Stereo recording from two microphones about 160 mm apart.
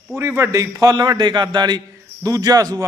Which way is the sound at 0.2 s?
15° right (ahead or behind).